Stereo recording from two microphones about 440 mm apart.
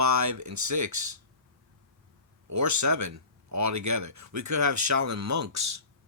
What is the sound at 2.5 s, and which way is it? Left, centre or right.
Speech, right.